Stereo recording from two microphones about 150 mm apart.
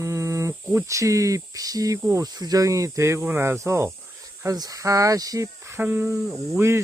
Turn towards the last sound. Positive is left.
turn(degrees=-15)  # may be behind; listen again after turning